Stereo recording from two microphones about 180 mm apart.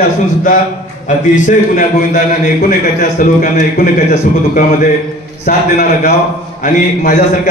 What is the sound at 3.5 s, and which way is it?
A man's voice, 45° left (ahead or behind).